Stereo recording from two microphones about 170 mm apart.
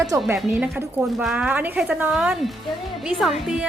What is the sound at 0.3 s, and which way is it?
A woman's voice, centre (ahead or behind).